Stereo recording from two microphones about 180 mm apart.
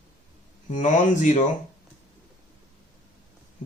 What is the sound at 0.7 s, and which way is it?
Speech, 45° left (ahead or behind).